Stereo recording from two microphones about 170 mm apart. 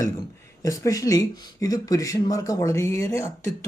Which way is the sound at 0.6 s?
20° left (ahead or behind).